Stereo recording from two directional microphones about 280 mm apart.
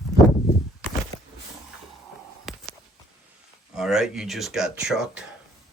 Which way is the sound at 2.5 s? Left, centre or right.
Centre.